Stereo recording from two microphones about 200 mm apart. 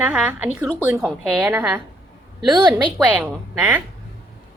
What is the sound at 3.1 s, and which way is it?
Speech, 10° right (ahead or behind).